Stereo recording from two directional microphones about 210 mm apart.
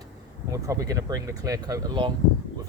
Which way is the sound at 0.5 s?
15° right (ahead or behind).